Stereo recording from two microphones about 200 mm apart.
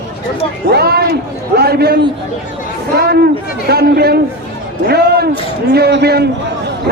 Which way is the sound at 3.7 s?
50° right (ahead or behind).